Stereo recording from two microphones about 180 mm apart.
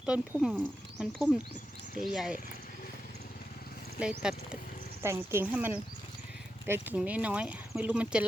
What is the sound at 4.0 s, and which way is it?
Speech, 5° right (ahead or behind).